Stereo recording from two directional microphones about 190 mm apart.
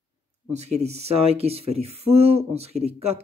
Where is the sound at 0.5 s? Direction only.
35° right (ahead or behind).